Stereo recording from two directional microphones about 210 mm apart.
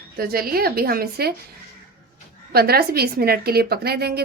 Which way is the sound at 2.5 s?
45° right (ahead or behind).